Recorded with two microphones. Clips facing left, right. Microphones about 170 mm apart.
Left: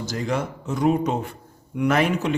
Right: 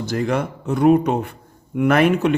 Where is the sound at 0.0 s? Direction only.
60° right (ahead or behind).